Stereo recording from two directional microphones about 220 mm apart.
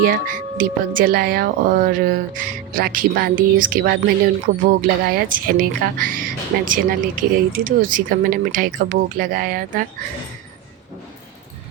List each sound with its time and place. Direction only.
0.0 s speech: 40° right (ahead or behind)